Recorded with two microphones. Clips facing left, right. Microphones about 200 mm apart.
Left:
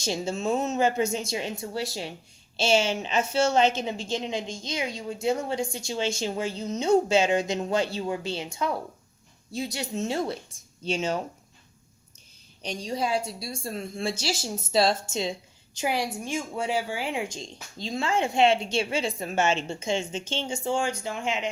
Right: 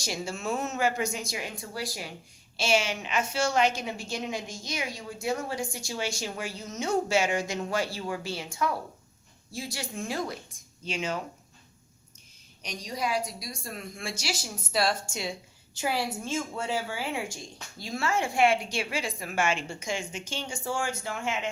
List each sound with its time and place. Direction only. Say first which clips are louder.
0.0 s a woman's voice: left 5 dB; 25° left (ahead or behind)
12.6 s a woman's voice: left 4 dB; 30° left (ahead or behind)